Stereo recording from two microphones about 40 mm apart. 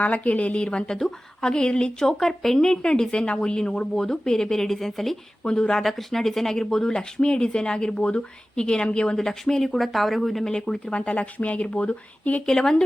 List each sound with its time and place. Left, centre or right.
0.0 s a woman's voice: left
0.9 s speech: centre
2.1 s speech: centre
5.4 s a woman's voice: left
5.8 s speech: centre
10.4 s speech: centre; by 12.4 s left
12.5 s speech: centre